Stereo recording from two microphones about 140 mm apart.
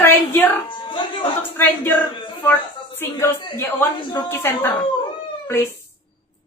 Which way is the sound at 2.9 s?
15° left (ahead or behind).